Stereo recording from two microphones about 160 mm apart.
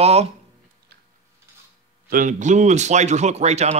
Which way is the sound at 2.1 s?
55° right (ahead or behind).